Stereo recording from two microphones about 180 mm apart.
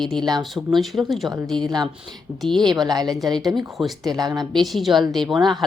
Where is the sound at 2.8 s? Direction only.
20° right (ahead or behind).